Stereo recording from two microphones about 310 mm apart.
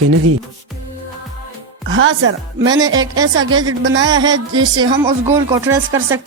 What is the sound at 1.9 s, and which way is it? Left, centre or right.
Speech, right.